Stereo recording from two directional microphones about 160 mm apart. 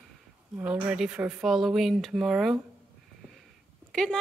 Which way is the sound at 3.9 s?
5° left (ahead or behind).